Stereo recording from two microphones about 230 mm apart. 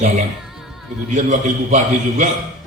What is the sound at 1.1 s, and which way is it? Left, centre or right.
A man's voice, right.